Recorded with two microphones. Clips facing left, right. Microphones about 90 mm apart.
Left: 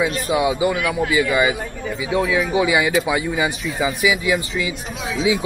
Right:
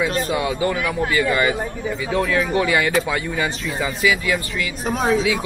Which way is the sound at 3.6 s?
Centre (ahead or behind).